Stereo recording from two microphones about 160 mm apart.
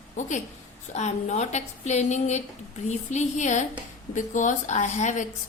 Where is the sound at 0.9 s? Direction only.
45° left (ahead or behind).